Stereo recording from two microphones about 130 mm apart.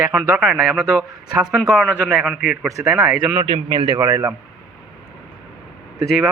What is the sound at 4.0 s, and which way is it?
Speech, 20° right (ahead or behind).